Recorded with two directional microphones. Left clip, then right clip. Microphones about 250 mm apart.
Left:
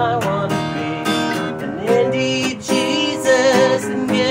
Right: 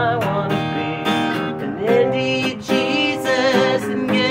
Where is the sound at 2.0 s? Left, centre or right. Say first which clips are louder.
Even; centre.